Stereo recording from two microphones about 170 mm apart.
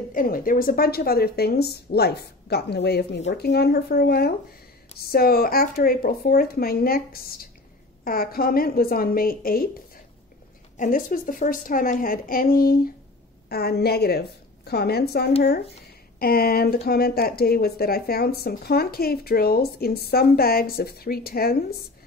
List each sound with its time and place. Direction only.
0.1 s speech: 55° left (ahead or behind)
10.8 s a woman's voice: 55° left (ahead or behind)